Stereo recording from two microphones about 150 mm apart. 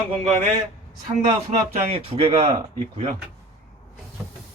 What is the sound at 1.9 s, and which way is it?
Speech, 40° right (ahead or behind).